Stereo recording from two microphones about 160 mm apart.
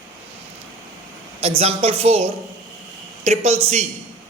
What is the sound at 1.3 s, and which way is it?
A man's voice, 40° right (ahead or behind).